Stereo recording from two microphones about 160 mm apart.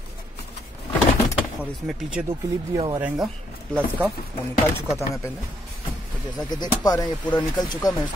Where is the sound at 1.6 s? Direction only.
5° right (ahead or behind).